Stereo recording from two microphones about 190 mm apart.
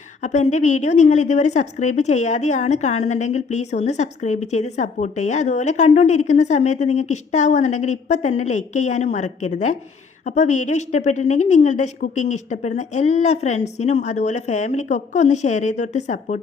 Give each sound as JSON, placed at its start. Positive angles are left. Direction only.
{"t": 0.2, "sound": "a woman's voice", "side_deg": 40}